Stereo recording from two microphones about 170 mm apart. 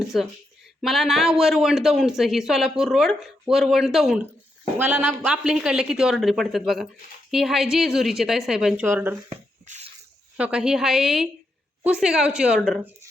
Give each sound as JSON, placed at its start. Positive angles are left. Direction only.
{"t": 0.8, "sound": "speech", "side_deg": 0}
{"t": 9.6, "sound": "a sound", "side_deg": -40}
{"t": 10.3, "sound": "speech", "side_deg": -5}